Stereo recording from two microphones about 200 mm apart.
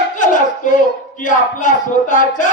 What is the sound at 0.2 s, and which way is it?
Speech, 40° left (ahead or behind).